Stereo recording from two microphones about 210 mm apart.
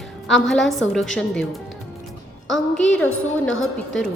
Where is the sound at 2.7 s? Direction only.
5° left (ahead or behind).